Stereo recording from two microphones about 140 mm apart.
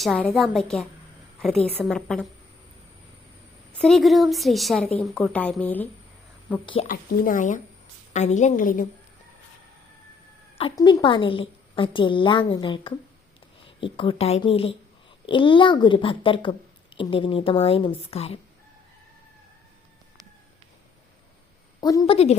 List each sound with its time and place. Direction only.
0.0 s a woman's voice: centre (ahead or behind)
3.7 s a woman's voice: centre (ahead or behind)
6.8 s speech: 80° left
8.1 s a woman's voice: 55° left (ahead or behind); by 8.9 s 70° left (ahead or behind)
10.8 s a woman's voice: 35° left (ahead or behind)
21.8 s a sound: 25° left (ahead or behind)
22.0 s a woman's voice: 45° left (ahead or behind)